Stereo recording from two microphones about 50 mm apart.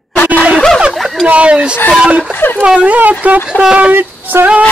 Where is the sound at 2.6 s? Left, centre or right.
Right.